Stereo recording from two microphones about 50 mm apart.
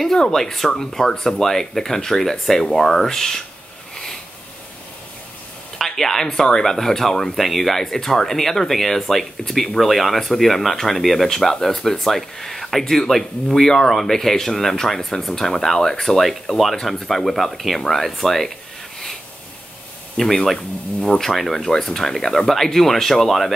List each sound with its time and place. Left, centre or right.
0.0 s speech: centre
3.9 s a sound: centre
5.8 s speech: centre
20.2 s speech: centre
21.2 s speech: centre